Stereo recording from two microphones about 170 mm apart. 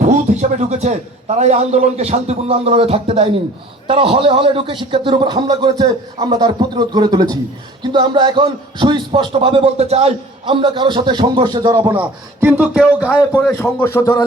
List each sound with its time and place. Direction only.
0.0 s a man's voice: 45° right (ahead or behind); by 11.8 s 25° right (ahead or behind)
11.9 s speech: 10° right (ahead or behind)
13.3 s speech: 15° left (ahead or behind)